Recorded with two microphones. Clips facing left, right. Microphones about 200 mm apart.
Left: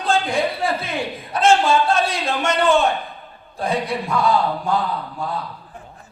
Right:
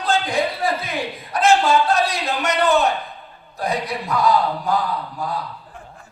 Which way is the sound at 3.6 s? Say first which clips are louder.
Left 2 dB; 30° left (ahead or behind).